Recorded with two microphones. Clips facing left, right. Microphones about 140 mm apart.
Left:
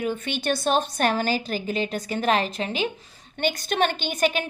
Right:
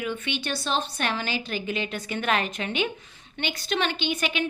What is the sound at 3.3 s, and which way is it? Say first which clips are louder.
A woman's voice: left 4 dB; 45° left (ahead or behind).